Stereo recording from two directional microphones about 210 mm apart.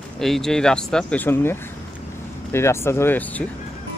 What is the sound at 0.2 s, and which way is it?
Speech, centre (ahead or behind).